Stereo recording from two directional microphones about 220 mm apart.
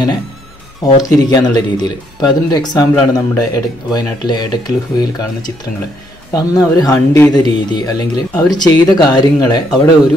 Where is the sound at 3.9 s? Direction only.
20° left (ahead or behind).